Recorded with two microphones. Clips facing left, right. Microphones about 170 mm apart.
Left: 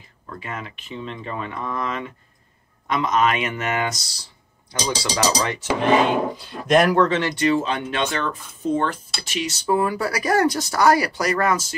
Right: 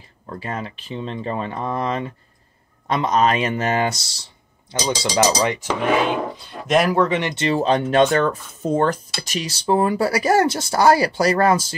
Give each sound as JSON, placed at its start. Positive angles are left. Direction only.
{"t": 0.3, "sound": "speech", "side_deg": -35}
{"t": 6.3, "sound": "speech", "side_deg": 0}
{"t": 7.1, "sound": "speech", "side_deg": -20}
{"t": 7.4, "sound": "speech", "side_deg": -35}